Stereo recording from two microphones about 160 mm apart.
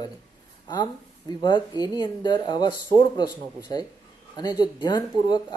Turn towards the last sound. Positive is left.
turn(degrees=25)  # may be behind; listen again after turning